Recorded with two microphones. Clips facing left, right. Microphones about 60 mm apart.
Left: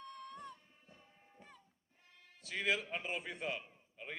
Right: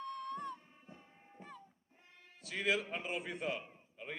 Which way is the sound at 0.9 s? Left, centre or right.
Right.